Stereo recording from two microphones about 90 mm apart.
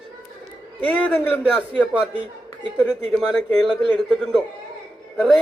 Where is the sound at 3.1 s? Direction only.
10° left (ahead or behind).